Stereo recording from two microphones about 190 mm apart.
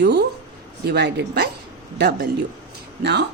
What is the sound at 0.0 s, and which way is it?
Speech, 65° right (ahead or behind).